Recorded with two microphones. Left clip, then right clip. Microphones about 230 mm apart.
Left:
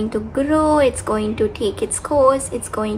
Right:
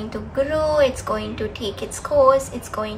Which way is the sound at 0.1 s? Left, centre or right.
Left.